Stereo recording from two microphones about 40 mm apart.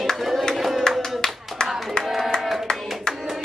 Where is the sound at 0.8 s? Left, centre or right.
Centre.